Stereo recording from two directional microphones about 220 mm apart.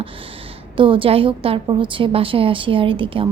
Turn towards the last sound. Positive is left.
turn(degrees=-25)  # may be behind; listen again after turning